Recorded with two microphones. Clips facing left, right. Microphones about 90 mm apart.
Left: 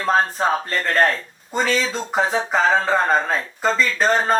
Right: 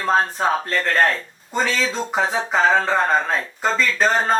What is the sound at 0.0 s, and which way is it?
Speech, centre (ahead or behind).